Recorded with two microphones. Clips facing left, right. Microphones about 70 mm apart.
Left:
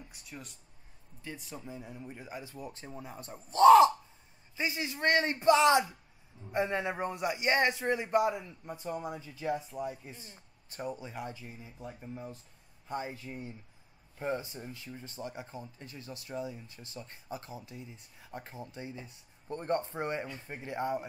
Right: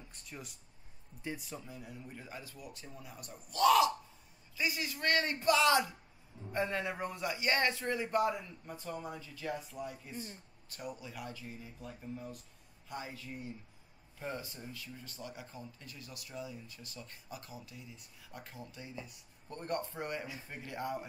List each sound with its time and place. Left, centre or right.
0.1 s speech: centre
1.6 s speech: left